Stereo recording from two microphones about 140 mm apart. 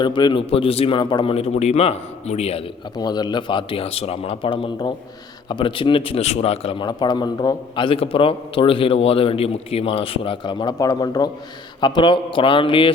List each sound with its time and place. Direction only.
0.0 s a man's voice: 35° left (ahead or behind)
3.0 s a man's voice: 30° left (ahead or behind)